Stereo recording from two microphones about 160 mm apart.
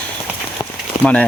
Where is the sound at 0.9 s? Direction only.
55° left (ahead or behind).